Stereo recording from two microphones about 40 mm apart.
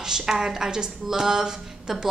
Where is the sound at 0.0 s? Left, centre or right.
Centre.